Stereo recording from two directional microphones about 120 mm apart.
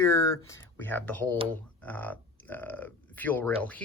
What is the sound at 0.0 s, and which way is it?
Speech, 25° left (ahead or behind).